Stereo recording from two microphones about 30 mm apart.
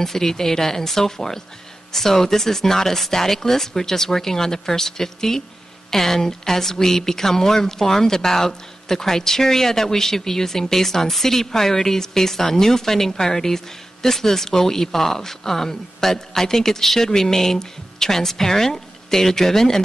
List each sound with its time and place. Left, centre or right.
0.0 s a woman's voice: centre